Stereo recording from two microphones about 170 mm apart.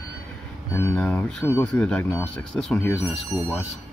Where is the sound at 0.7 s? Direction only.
15° left (ahead or behind); by 3.6 s centre (ahead or behind).